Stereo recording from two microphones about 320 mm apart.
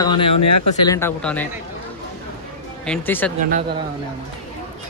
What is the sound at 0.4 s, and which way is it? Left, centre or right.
Speech, left.